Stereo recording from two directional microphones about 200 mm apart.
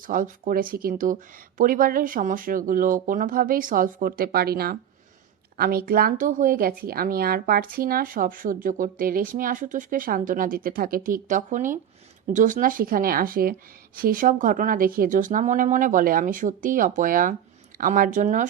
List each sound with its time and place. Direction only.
0.1 s speech: 40° right (ahead or behind)